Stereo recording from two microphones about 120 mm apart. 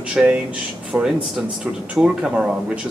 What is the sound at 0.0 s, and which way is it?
Speech, 10° right (ahead or behind).